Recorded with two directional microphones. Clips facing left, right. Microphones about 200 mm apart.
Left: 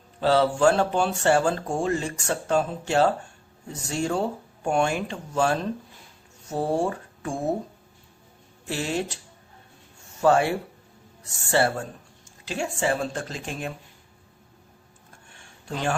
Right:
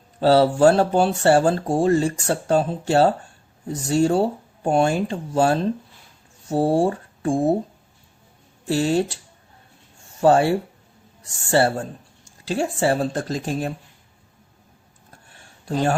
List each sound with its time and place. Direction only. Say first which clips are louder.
0.2 s speech: right 5 dB; 35° right (ahead or behind)
8.6 s speech: right 8 dB; 35° right (ahead or behind)
10.2 s speech: right 4 dB; 30° right (ahead or behind)
15.3 s a sound: right 7 dB; 40° right (ahead or behind)